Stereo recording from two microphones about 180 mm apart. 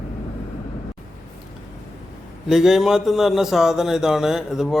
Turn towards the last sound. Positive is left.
turn(degrees=0)  # may be behind; listen again after turning